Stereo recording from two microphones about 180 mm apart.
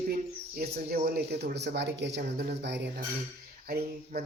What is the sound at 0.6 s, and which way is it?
Speech, 60° right (ahead or behind).